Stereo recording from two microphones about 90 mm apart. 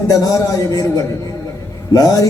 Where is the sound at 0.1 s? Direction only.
40° left (ahead or behind).